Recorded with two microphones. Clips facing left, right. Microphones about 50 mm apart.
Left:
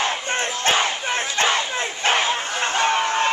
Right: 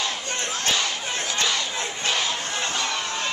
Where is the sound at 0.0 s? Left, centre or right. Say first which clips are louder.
Left 5 dB; left.